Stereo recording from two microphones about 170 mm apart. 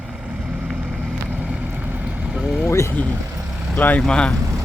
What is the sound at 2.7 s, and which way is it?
Speech, 15° left (ahead or behind).